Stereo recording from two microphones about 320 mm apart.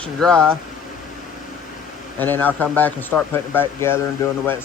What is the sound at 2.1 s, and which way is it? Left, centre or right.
Speech, centre.